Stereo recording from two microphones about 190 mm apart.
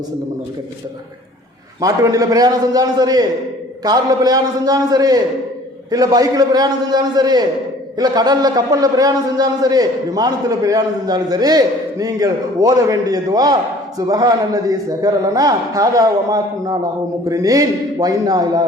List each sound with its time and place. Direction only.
1.8 s a man's voice: 20° right (ahead or behind)